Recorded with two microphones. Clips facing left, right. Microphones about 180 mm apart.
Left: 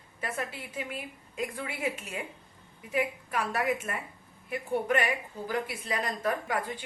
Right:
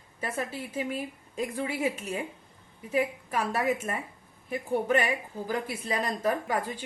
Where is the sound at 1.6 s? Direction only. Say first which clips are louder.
Right 4 dB; 35° right (ahead or behind).